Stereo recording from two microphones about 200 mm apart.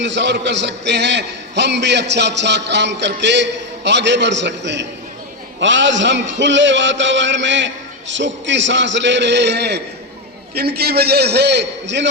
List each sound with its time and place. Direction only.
0.0 s a man's voice: 60° right (ahead or behind)